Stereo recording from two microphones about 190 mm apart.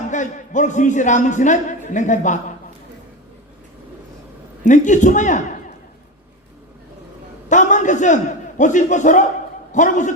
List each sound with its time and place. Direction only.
0.1 s a man's voice: 40° left (ahead or behind)
4.6 s a man's voice: 40° left (ahead or behind)
7.4 s a man's voice: 40° left (ahead or behind)